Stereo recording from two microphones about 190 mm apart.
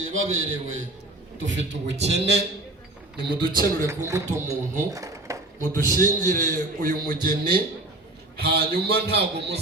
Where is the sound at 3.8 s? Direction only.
15° right (ahead or behind).